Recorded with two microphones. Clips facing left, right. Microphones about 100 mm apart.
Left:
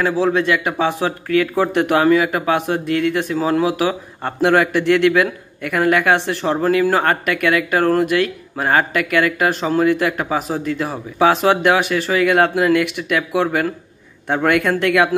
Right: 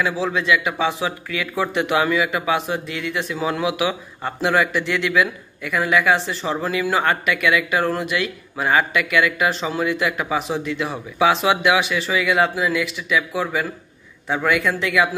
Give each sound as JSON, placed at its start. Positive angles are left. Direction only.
{"t": 0.0, "sound": "speech", "side_deg": 50}